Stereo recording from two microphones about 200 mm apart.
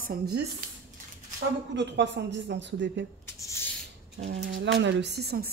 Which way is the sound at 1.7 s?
60° right (ahead or behind).